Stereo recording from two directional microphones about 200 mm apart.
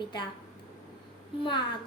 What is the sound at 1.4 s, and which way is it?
Speech, 25° left (ahead or behind).